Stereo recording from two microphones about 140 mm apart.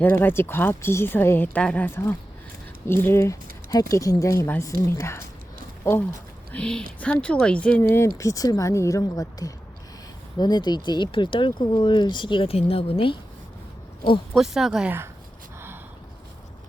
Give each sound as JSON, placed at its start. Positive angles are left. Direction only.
{"t": 0.0, "sound": "speech", "side_deg": 15}
{"t": 6.5, "sound": "speech", "side_deg": 5}
{"t": 14.3, "sound": "speech", "side_deg": -5}